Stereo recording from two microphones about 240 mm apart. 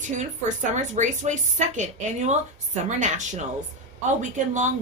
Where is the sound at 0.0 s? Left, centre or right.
Right.